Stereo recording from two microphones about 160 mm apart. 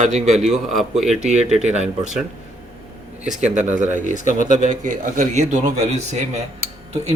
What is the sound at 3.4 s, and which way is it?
A man's voice, 45° right (ahead or behind).